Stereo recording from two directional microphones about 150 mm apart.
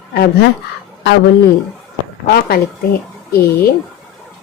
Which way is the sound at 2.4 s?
90° left.